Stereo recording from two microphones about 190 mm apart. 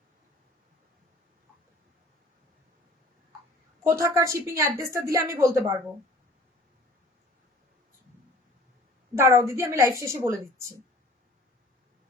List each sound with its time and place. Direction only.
3.8 s speech: 15° right (ahead or behind)
9.1 s speech: 15° right (ahead or behind)